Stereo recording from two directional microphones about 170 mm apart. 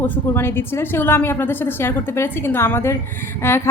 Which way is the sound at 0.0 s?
15° left (ahead or behind).